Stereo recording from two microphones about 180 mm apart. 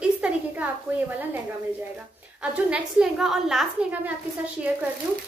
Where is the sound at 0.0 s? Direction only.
5° right (ahead or behind).